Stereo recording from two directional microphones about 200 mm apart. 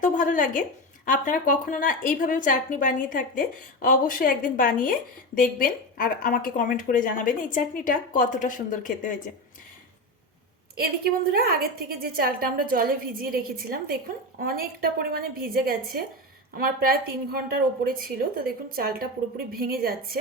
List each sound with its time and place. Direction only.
0.0 s a woman's voice: 40° left (ahead or behind)
10.8 s a woman's voice: 50° right (ahead or behind)